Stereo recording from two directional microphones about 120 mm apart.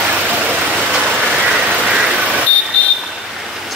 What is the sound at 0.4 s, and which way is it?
Vehicle, 15° right (ahead or behind).